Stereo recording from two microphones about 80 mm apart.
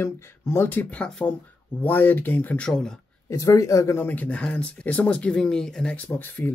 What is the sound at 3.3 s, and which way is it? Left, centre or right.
Speech, left.